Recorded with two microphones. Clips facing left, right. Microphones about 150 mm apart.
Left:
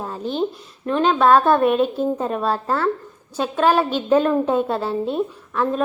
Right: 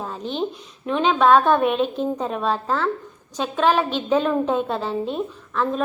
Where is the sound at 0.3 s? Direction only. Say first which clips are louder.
Left 3 dB; centre (ahead or behind).